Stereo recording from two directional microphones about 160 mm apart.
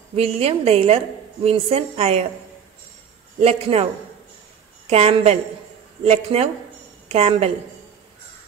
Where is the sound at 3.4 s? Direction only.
40° right (ahead or behind).